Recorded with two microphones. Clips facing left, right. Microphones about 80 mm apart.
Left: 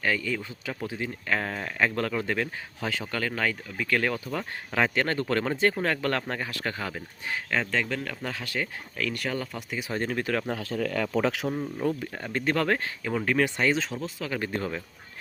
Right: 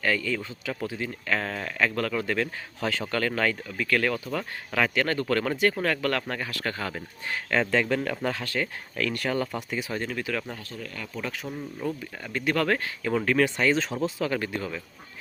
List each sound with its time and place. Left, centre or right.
0.0 s speech: centre
3.8 s speech: left
7.5 s speech: centre
9.9 s speech: left
11.0 s speech: left
11.4 s speech: left
12.5 s speech: left
14.0 s speech: centre
14.5 s speech: left